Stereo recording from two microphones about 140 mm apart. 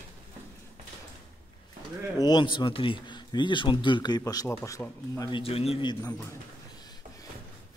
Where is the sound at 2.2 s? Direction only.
30° left (ahead or behind).